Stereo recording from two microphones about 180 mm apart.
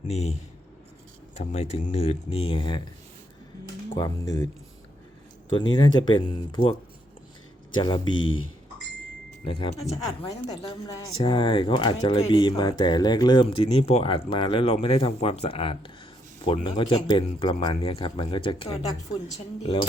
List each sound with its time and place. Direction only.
0.1 s speech: 35° left (ahead or behind)
1.4 s speech: 35° left (ahead or behind)
3.9 s speech: 20° left (ahead or behind)
5.7 s speech: 25° left (ahead or behind)
7.8 s speech: 25° left (ahead or behind)
9.5 s speech: 35° left (ahead or behind)
10.2 s speech: 20° left (ahead or behind)